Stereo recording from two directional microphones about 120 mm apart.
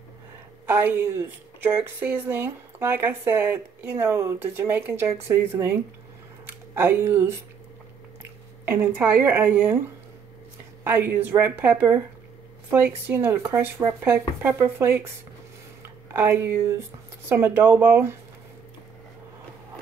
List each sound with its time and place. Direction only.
0.7 s a woman's voice: 15° right (ahead or behind)
16.1 s a woman's voice: 20° right (ahead or behind)